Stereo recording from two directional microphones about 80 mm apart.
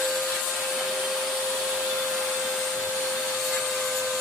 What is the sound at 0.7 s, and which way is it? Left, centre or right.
Vacuum cleaner, centre.